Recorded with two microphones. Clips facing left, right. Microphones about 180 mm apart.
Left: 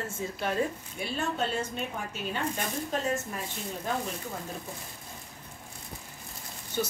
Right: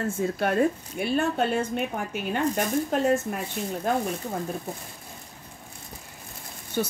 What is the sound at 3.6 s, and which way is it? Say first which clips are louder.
Speech: right 7 dB; 60° right (ahead or behind).